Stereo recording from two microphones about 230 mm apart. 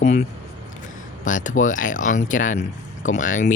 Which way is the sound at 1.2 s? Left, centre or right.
Left.